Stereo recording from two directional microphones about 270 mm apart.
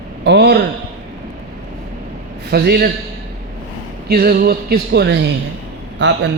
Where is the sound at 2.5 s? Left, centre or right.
Right.